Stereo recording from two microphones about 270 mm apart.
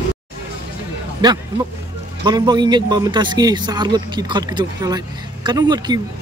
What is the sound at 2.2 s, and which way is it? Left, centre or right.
A man's voice, centre.